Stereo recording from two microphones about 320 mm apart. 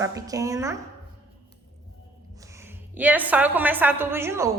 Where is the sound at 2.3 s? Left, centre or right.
Centre.